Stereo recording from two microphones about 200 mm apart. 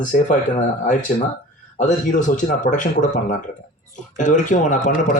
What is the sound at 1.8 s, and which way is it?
A man's voice, 40° left (ahead or behind).